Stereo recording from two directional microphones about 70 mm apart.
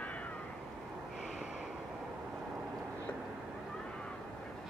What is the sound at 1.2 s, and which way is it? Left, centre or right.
Snort, centre.